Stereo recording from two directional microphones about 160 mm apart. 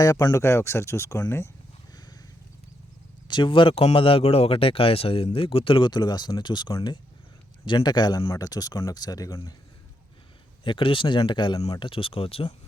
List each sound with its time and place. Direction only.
0.0 s speech: 25° left (ahead or behind)
3.2 s speech: 30° left (ahead or behind)
10.6 s speech: 30° left (ahead or behind)